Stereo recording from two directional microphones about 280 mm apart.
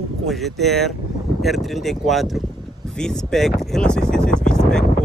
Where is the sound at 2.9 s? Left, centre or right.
Centre.